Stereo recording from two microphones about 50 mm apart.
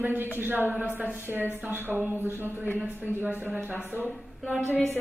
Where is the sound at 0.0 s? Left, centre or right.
Right.